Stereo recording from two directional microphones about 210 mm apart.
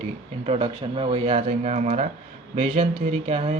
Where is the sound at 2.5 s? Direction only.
25° right (ahead or behind).